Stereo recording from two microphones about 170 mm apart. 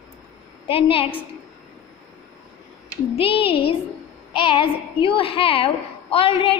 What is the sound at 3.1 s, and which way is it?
Speech, 35° left (ahead or behind).